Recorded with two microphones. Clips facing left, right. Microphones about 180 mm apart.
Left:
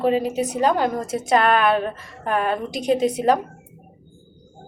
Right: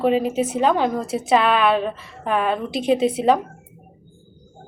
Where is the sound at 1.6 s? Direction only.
Centre (ahead or behind).